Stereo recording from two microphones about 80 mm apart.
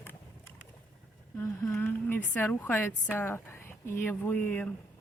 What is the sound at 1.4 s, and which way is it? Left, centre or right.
Speech, left.